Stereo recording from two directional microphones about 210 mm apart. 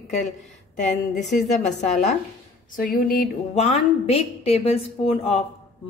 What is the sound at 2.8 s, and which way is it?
Speech, 45° left (ahead or behind).